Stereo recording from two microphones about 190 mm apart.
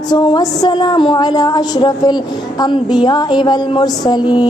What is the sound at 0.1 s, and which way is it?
Speech, 20° left (ahead or behind).